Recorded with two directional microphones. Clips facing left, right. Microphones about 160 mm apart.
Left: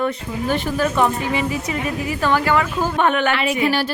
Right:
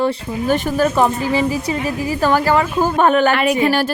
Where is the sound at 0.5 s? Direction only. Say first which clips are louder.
Right 4 dB; 45° right (ahead or behind).